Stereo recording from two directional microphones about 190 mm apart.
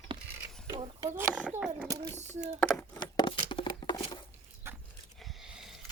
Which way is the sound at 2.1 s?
35° right (ahead or behind).